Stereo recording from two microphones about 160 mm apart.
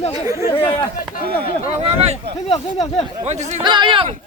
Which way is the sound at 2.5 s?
25° left (ahead or behind).